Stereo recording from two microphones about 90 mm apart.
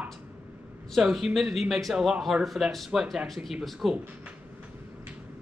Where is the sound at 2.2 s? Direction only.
Centre (ahead or behind).